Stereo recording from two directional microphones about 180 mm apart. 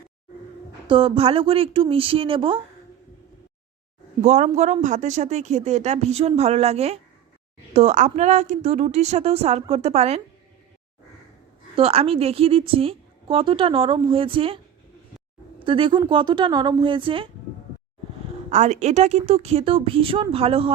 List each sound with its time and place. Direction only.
0.9 s speech: 30° right (ahead or behind)
4.2 s speech: 40° right (ahead or behind)
11.8 s a woman's voice: 35° right (ahead or behind)
18.5 s speech: 40° right (ahead or behind)